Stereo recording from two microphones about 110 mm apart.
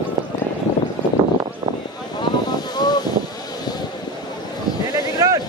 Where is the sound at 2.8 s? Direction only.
40° left (ahead or behind).